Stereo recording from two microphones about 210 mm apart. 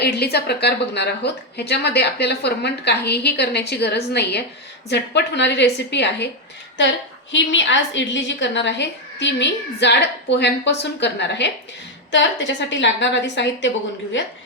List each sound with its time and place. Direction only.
0.0 s a woman's voice: 50° left (ahead or behind)